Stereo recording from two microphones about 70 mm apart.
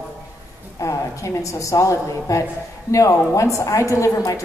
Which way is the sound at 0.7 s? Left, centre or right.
Left.